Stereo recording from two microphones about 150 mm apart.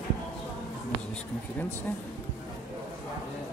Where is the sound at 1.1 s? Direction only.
10° left (ahead or behind).